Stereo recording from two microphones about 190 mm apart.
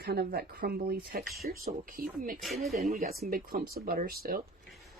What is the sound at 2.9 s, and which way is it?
Speech, 50° right (ahead or behind).